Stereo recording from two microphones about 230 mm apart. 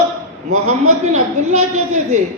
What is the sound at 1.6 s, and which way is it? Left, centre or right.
Speech, right.